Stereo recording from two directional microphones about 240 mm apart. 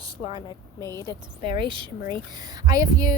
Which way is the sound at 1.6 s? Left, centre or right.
Centre.